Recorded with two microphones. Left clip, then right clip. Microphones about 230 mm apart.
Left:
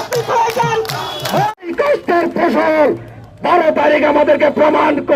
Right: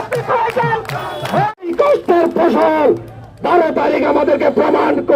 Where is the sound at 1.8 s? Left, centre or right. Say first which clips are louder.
Right 1 dB; left.